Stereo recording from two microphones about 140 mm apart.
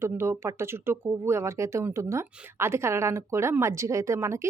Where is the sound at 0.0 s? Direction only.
20° right (ahead or behind).